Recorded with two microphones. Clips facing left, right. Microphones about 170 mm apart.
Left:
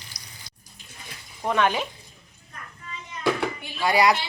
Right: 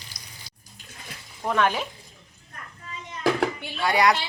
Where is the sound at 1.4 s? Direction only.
Centre (ahead or behind).